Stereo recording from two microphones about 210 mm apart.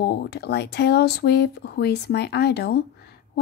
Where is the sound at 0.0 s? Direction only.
50° left (ahead or behind).